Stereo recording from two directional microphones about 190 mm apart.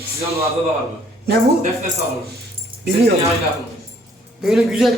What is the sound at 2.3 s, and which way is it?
Keys jangling, 60° right (ahead or behind).